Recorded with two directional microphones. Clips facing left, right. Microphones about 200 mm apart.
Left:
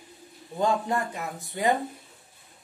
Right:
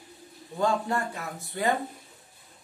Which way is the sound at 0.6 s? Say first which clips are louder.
Left 1 dB; 15° left (ahead or behind).